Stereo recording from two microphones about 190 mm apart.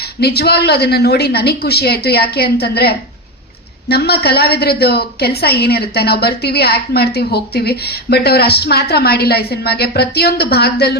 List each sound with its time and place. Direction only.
0.0 s a woman's voice: 55° left (ahead or behind)